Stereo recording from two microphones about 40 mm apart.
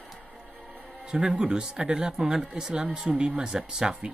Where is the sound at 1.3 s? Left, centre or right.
Right.